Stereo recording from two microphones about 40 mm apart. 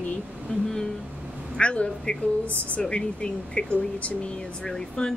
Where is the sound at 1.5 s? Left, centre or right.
Left.